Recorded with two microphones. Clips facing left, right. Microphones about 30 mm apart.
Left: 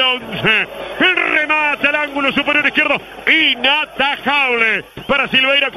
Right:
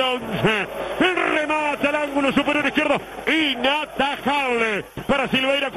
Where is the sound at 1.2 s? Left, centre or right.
Centre.